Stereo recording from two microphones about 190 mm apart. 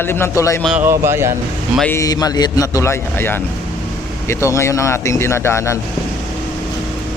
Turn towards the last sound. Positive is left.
turn(degrees=15)  # may be behind; listen again after turning